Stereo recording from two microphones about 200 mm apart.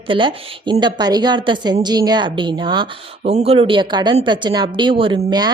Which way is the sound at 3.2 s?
35° right (ahead or behind).